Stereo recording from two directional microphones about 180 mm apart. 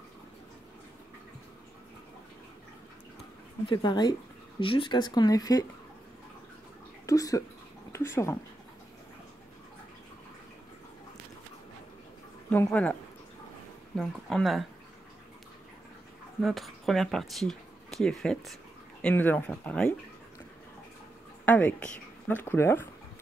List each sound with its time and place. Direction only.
3.6 s speech: 25° left (ahead or behind)
7.1 s speech: 20° left (ahead or behind)
12.4 s speech: 10° left (ahead or behind)
13.9 s speech: centre (ahead or behind)
16.3 s speech: centre (ahead or behind)
21.5 s speech: 10° left (ahead or behind)